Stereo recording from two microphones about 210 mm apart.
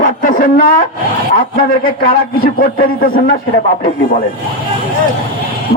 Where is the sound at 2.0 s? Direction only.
45° left (ahead or behind).